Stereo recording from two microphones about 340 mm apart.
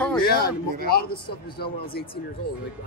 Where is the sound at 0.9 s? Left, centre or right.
Left.